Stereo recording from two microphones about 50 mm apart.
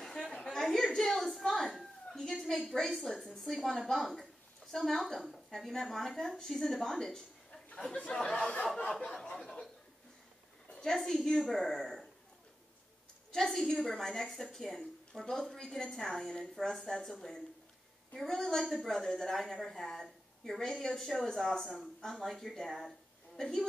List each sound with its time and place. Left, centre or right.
0.5 s a sound: centre
0.9 s a woman's voice: centre
4.0 s a woman's voice: centre
9.2 s speech: centre
10.8 s a woman's voice: centre
13.3 s a woman's voice: centre